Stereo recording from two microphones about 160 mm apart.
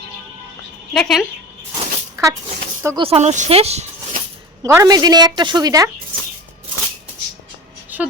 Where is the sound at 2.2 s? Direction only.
20° right (ahead or behind).